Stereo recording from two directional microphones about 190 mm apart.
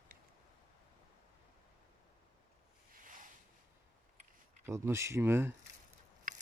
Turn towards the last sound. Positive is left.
turn(degrees=-10)  # may be behind; listen again after turning